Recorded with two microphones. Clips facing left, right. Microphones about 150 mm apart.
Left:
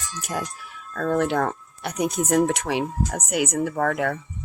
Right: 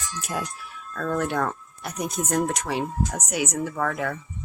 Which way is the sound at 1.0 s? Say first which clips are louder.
Left 3 dB; 65° left (ahead or behind).